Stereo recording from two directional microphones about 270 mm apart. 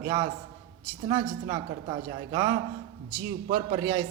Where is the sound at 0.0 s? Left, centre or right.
Centre.